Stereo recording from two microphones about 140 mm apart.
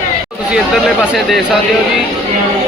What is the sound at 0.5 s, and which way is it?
Speech, centre (ahead or behind).